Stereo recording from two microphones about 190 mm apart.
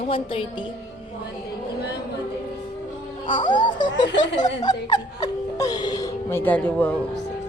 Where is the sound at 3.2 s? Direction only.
25° left (ahead or behind); by 7.0 s 5° left (ahead or behind).